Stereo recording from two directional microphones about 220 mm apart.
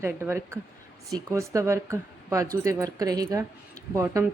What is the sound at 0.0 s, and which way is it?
Speech, 10° right (ahead or behind).